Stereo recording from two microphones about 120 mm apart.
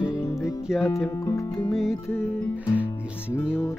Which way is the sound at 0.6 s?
5° right (ahead or behind).